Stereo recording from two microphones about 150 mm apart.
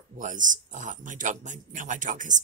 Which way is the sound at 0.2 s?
60° right (ahead or behind).